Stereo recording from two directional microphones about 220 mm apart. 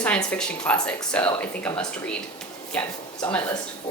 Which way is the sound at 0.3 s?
5° left (ahead or behind).